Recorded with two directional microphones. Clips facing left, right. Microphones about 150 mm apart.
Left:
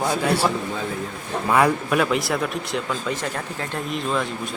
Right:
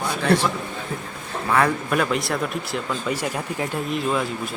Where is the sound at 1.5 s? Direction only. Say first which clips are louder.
Left 2 dB; 10° left (ahead or behind).